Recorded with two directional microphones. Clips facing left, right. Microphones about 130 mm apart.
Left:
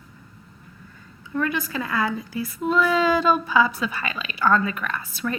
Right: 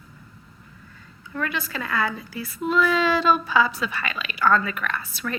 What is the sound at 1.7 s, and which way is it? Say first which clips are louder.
A woman's voice: left 1 dB; 20° left (ahead or behind).